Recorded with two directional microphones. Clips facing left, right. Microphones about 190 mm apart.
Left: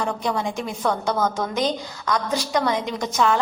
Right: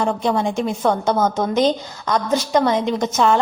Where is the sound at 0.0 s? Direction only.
25° right (ahead or behind).